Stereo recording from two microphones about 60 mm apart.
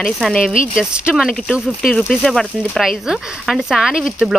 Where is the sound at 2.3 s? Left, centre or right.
Centre.